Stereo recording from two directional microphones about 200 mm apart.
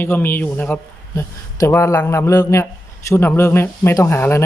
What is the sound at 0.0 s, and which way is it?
Speech, 10° left (ahead or behind).